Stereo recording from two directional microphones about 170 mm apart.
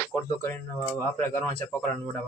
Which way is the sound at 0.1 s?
Centre (ahead or behind).